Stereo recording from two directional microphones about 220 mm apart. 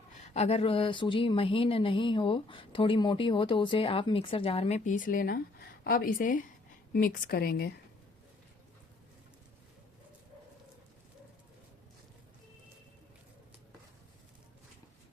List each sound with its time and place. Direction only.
0.2 s a woman's voice: 30° left (ahead or behind); by 7.7 s 45° left (ahead or behind)